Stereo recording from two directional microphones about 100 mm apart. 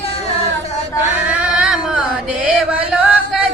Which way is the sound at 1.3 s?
10° right (ahead or behind).